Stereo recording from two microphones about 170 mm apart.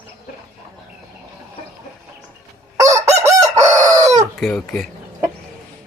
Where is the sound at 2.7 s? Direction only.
20° right (ahead or behind).